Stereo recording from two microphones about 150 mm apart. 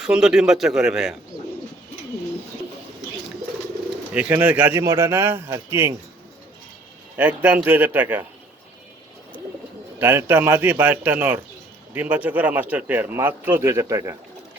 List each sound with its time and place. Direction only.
0.0 s a man's voice: 5° right (ahead or behind)
4.1 s speech: 10° right (ahead or behind)
7.2 s speech: 10° right (ahead or behind)
10.0 s speech: 15° right (ahead or behind)